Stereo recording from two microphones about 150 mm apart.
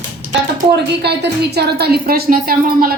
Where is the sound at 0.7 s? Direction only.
90° right.